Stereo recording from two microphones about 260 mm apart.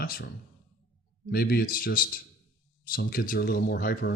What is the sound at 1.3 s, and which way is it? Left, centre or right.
Speech, left.